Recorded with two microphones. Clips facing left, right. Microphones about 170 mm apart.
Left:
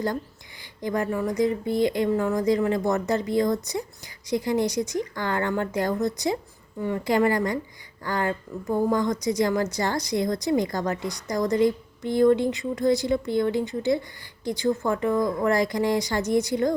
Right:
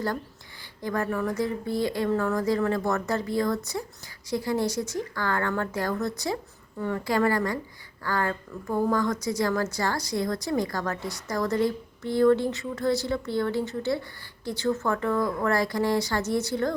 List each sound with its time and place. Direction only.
0.8 s a woman's voice: 15° left (ahead or behind)